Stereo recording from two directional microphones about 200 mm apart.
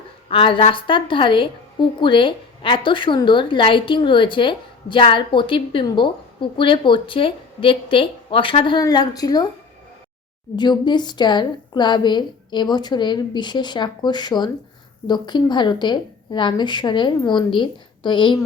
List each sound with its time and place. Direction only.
0.3 s a woman's voice: 25° left (ahead or behind)
10.6 s a woman's voice: 20° left (ahead or behind)